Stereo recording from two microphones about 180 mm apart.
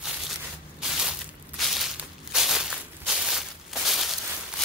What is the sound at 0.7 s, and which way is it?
Crushing, centre (ahead or behind).